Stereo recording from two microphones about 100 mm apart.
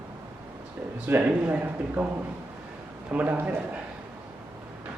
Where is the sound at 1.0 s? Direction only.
20° right (ahead or behind).